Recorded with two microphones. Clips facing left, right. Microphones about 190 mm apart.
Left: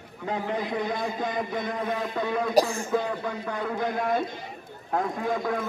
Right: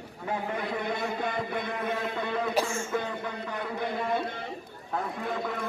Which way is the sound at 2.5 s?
35° left (ahead or behind).